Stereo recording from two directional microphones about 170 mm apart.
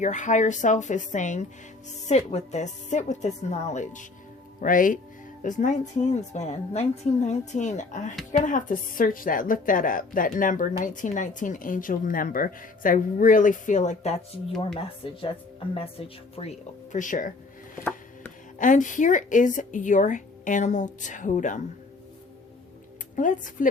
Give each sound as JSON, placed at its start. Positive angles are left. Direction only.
{"t": 0.0, "sound": "a woman's voice", "side_deg": 45}
{"t": 15.7, "sound": "speech", "side_deg": 35}
{"t": 18.6, "sound": "a woman's voice", "side_deg": 50}
{"t": 23.1, "sound": "a woman's voice", "side_deg": 50}